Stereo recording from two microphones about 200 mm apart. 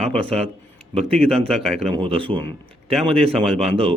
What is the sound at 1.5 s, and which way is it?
Speech, centre (ahead or behind).